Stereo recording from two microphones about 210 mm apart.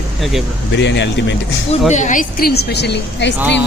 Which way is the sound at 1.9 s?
35° left (ahead or behind).